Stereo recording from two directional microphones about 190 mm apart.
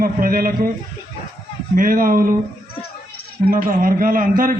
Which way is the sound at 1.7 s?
45° right (ahead or behind).